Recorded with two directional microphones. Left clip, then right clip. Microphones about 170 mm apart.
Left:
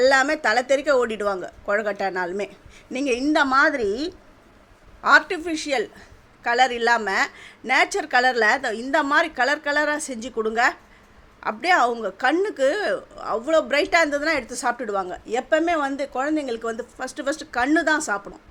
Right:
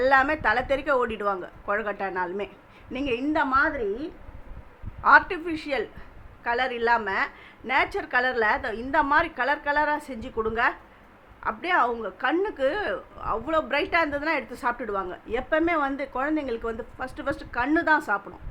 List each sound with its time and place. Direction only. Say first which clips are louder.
0.0 s speech: left 3 dB; 25° left (ahead or behind)
3.3 s a woman's voice: left 5 dB; 50° left (ahead or behind)
5.0 s speech: left 1 dB; 20° left (ahead or behind)